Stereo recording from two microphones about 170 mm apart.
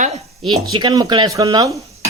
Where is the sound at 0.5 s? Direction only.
30° right (ahead or behind).